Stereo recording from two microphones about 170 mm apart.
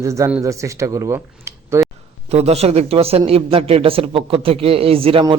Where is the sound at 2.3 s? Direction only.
40° right (ahead or behind).